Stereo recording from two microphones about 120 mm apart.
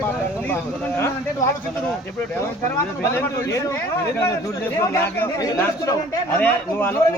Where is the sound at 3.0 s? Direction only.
25° left (ahead or behind).